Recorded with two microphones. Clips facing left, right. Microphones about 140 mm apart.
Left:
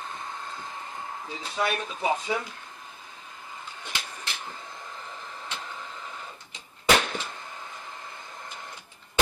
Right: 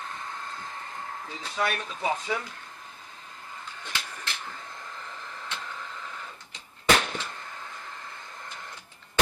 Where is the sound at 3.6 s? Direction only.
15° left (ahead or behind).